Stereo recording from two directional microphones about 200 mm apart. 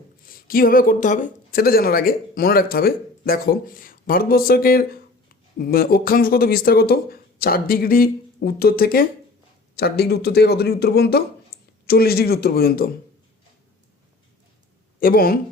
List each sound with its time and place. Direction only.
0.3 s a man's voice: 45° left (ahead or behind)
15.0 s a man's voice: 45° left (ahead or behind)